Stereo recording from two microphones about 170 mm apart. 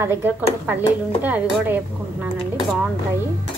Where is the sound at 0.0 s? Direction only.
10° right (ahead or behind).